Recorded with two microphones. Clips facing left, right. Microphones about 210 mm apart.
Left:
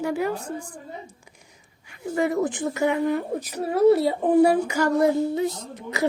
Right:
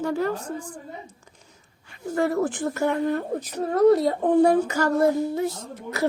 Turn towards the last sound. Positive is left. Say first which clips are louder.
# even
turn(degrees=15)  # may be behind; listen again after turning